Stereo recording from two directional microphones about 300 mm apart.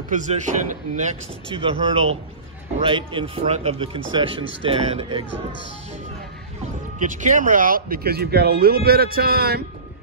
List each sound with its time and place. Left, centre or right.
0.1 s a man's voice: right
7.0 s speech: right